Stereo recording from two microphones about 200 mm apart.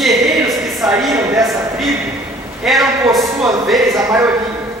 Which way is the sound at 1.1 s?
15° right (ahead or behind).